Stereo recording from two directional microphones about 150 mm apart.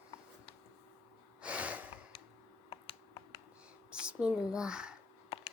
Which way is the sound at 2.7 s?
35° left (ahead or behind).